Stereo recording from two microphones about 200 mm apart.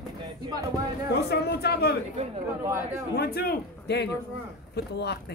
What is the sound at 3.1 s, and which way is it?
Speech, 50° left (ahead or behind).